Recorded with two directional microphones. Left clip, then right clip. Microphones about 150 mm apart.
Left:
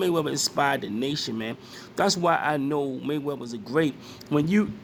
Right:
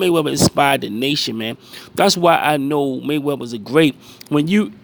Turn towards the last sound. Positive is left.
turn(degrees=-40)  # may be behind; listen again after turning